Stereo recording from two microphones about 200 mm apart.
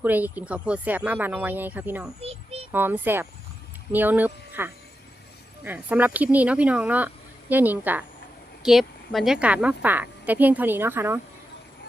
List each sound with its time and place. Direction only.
0.0 s a woman's voice: 10° right (ahead or behind)
2.2 s child singing: 30° right (ahead or behind)
2.7 s a woman's voice: 10° right (ahead or behind)